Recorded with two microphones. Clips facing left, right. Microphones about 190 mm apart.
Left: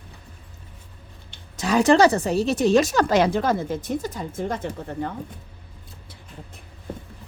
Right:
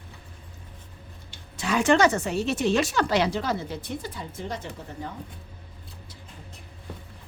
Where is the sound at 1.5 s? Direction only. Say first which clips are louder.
Left 4 dB; 40° left (ahead or behind).